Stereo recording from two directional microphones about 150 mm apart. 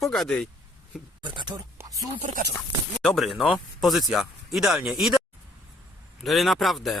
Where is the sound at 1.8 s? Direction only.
20° right (ahead or behind).